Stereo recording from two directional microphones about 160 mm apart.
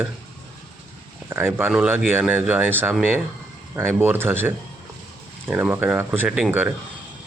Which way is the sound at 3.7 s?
15° right (ahead or behind).